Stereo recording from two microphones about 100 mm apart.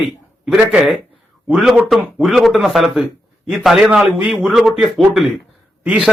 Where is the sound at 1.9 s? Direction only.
10° right (ahead or behind).